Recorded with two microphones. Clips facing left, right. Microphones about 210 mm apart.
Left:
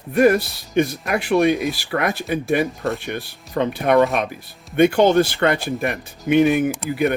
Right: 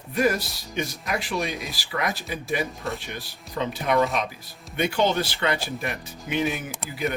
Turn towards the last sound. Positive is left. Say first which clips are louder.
# left 10 dB
turn(degrees=60)  # may be behind; listen again after turning